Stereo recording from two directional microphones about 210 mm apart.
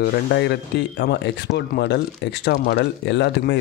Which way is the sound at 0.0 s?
50° left (ahead or behind).